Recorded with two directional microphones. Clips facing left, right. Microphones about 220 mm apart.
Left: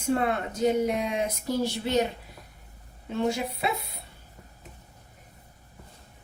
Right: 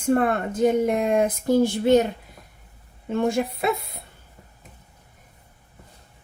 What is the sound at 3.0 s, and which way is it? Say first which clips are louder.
Speech: right 5 dB; 50° right (ahead or behind).